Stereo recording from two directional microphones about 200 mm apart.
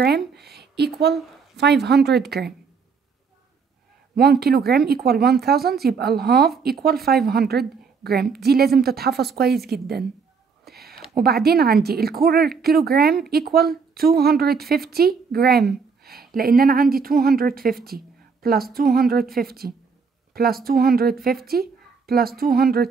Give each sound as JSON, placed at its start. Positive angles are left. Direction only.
{"t": 0.0, "sound": "speech", "side_deg": -55}
{"t": 4.1, "sound": "a woman's voice", "side_deg": -50}
{"t": 10.6, "sound": "a sound", "side_deg": -50}
{"t": 11.1, "sound": "a woman's voice", "side_deg": -50}
{"t": 16.0, "sound": "a sound", "side_deg": -50}
{"t": 16.3, "sound": "a woman's voice", "side_deg": -50}